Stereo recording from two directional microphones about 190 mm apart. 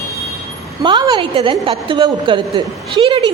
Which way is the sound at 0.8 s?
25° right (ahead or behind).